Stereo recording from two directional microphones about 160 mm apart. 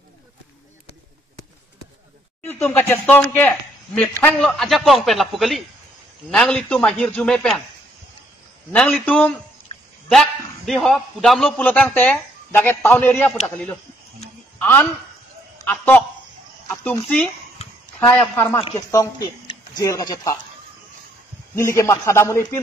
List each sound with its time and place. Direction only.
2.4 s speech: 15° left (ahead or behind)
9.0 s a man's voice: 5° left (ahead or behind); by 20.3 s 20° left (ahead or behind)
21.5 s speech: 20° left (ahead or behind)